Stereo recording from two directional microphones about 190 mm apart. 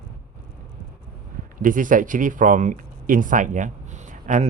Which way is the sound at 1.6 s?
45° right (ahead or behind).